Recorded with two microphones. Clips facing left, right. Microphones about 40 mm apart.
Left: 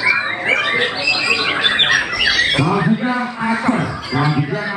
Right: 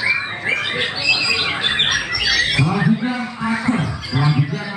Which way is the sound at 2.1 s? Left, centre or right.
Left.